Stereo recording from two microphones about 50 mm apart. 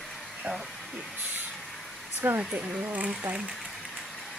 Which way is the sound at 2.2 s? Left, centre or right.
Right.